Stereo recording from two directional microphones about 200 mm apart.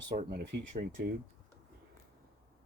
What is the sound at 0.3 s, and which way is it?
Speech, 50° right (ahead or behind).